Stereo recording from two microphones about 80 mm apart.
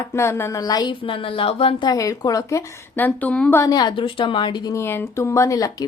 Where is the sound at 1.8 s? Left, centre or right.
Left.